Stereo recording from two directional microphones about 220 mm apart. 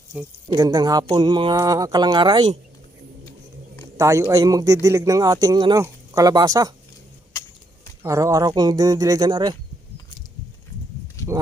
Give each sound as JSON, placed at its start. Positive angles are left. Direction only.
{"t": 0.1, "sound": "speech", "side_deg": -5}
{"t": 0.5, "sound": "speech", "side_deg": -15}
{"t": 3.9, "sound": "speech", "side_deg": -15}
{"t": 8.0, "sound": "speech", "side_deg": -15}
{"t": 11.2, "sound": "a sound", "side_deg": 15}